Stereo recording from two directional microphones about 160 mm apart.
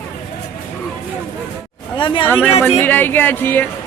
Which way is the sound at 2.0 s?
30° left (ahead or behind).